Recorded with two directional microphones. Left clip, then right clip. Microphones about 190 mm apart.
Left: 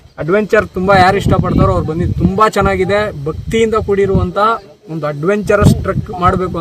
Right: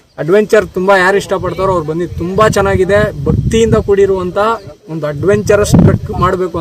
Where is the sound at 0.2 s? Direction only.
20° right (ahead or behind).